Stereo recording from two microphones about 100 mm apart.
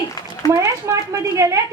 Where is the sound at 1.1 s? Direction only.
30° right (ahead or behind).